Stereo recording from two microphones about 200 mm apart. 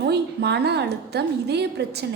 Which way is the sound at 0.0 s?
55° right (ahead or behind).